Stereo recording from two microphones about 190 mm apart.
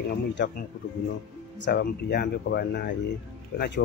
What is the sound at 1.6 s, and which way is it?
Speech, 60° left (ahead or behind).